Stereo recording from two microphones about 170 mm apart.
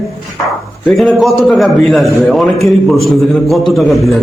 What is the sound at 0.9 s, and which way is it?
A man's voice, centre (ahead or behind).